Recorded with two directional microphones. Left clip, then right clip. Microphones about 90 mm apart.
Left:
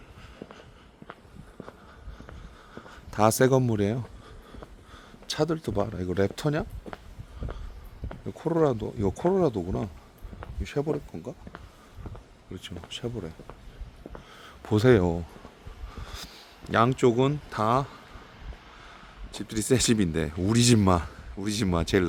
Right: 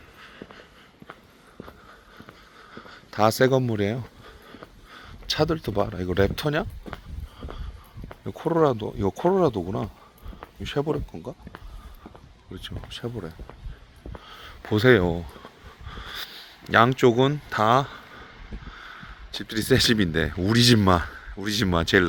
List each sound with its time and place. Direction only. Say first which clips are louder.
3.1 s speech: right 2 dB; 55° left (ahead or behind)
3.7 s speech: right 1 dB; 45° left (ahead or behind)
4.9 s a sound: right 7 dB; 30° left (ahead or behind)
5.9 s speech: right 4 dB; 15° left (ahead or behind)
8.3 s speech: right 3 dB; 5° left (ahead or behind)
8.6 s speech: right 2 dB; 20° left (ahead or behind)
9.6 s speech: right 2 dB; 20° left (ahead or behind)
10.6 s a man's voice: right 3 dB; centre (ahead or behind)
12.5 s speech: right 1 dB; 10° left (ahead or behind)
14.3 s a sound: right 5 dB; 25° left (ahead or behind)
14.6 s speech: right 3 dB; 40° left (ahead or behind)
15.9 s snort: right 7 dB; 20° left (ahead or behind)
16.6 s a man's voice: right 4 dB; 5° left (ahead or behind)
19.4 s speech: right 4 dB; 10° left (ahead or behind)